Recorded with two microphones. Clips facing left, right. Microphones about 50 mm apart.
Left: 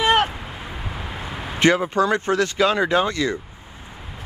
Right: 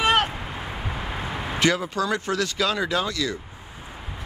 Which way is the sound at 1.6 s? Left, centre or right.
Left.